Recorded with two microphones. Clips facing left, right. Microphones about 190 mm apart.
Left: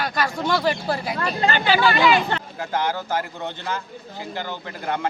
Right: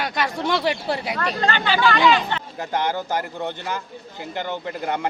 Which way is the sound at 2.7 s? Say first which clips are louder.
Right 1 dB; 20° right (ahead or behind).